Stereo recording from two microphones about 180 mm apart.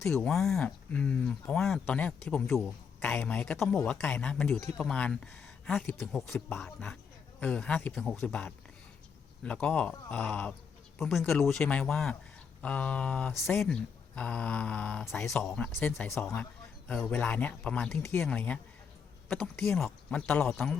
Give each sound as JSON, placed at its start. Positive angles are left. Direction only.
{"t": 0.1, "sound": "speech", "side_deg": 5}
{"t": 6.0, "sound": "a man's voice", "side_deg": 0}